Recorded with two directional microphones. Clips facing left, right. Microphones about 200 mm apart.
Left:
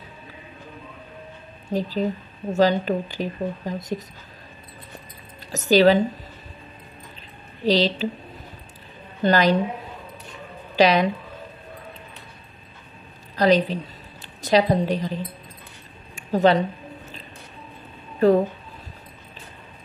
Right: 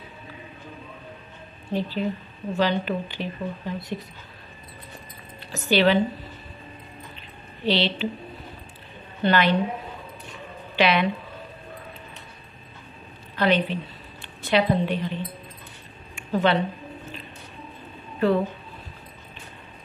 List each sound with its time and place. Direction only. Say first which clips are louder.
1.7 s speech: left 2 dB; 40° left (ahead or behind)
5.5 s speech: left 4 dB; 40° left (ahead or behind)
7.6 s speech: left 3 dB; 40° left (ahead or behind)
9.2 s speech: left 2 dB; 40° left (ahead or behind)
10.8 s speech: left 4 dB; 40° left (ahead or behind)
13.4 s a woman's voice: left 4 dB; 40° left (ahead or behind)